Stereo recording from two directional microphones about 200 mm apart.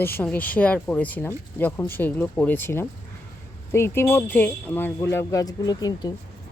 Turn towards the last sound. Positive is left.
turn(degrees=20)  # may be behind; listen again after turning